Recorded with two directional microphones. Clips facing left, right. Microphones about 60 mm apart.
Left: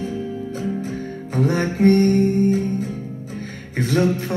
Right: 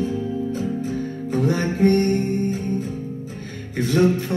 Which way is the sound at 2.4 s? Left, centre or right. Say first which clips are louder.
Left 4 dB; left.